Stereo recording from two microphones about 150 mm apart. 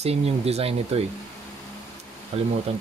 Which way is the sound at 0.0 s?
45° right (ahead or behind).